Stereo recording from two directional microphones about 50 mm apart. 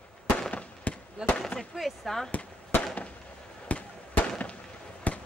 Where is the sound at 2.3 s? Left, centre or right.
Left.